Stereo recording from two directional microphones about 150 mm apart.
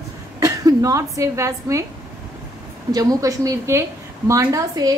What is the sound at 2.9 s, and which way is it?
A woman's voice, 20° right (ahead or behind).